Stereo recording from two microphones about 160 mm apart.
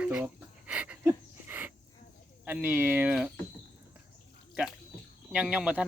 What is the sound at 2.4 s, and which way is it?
Speech, 10° right (ahead or behind).